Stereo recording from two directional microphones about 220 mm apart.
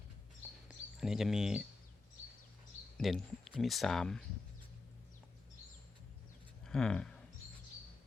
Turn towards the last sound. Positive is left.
turn(degrees=5)  # may be behind; listen again after turning